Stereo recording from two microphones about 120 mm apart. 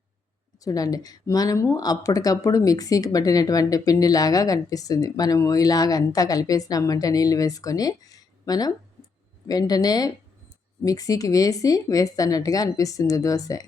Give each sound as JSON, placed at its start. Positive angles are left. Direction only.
{"t": 0.6, "sound": "speech", "side_deg": 30}